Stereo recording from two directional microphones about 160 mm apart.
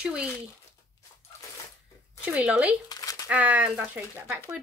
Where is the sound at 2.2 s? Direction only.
10° right (ahead or behind).